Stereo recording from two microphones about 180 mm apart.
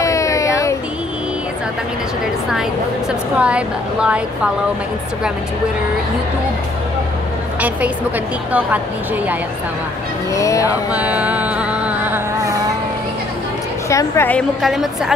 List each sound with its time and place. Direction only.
0.0 s a sound: 15° left (ahead or behind)
3.3 s a woman's voice: 5° right (ahead or behind)
8.5 s a woman's voice: 10° right (ahead or behind)
10.3 s a woman's voice: 15° left (ahead or behind)
10.9 s a sound: 10° right (ahead or behind)
13.8 s a woman's voice: 15° left (ahead or behind)
14.6 s a woman's voice: centre (ahead or behind)